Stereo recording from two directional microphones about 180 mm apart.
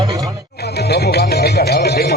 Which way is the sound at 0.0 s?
20° right (ahead or behind).